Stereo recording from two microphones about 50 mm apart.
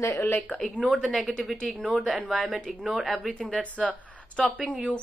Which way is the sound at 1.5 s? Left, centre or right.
Centre.